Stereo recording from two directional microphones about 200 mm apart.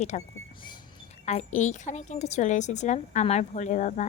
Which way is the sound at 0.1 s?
35° left (ahead or behind).